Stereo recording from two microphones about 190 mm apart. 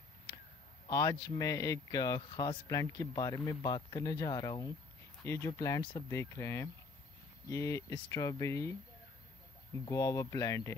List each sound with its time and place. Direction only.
0.8 s a man's voice: 15° left (ahead or behind)
9.8 s speech: 15° left (ahead or behind)